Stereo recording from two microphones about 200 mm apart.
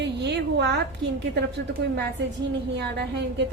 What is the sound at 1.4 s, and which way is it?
A woman's voice, 60° right (ahead or behind).